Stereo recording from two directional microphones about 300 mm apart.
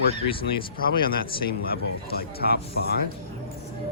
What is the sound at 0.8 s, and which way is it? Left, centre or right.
Speech, left.